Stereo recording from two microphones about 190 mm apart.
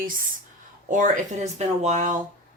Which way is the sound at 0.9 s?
45° right (ahead or behind).